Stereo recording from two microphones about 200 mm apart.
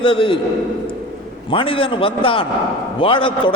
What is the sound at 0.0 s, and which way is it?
Speech, 25° left (ahead or behind).